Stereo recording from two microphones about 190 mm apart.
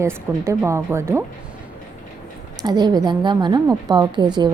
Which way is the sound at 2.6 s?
20° right (ahead or behind).